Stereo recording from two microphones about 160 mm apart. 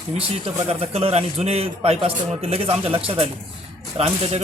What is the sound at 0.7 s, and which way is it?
A man's voice, 40° right (ahead or behind).